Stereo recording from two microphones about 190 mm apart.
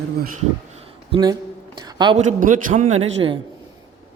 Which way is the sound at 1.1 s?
25° right (ahead or behind).